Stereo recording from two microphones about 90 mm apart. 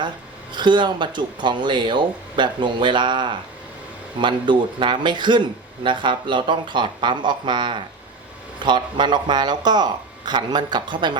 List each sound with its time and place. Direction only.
0.5 s speech: 60° right (ahead or behind)